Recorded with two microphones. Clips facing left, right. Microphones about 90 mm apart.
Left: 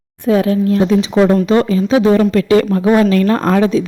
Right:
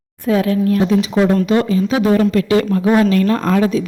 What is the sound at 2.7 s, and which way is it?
Speech, 30° left (ahead or behind).